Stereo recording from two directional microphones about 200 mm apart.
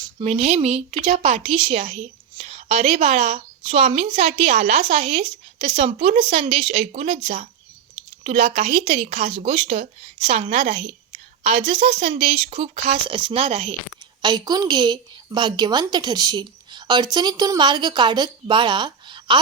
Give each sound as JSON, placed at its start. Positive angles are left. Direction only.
{"t": 0.2, "sound": "a woman's voice", "side_deg": -30}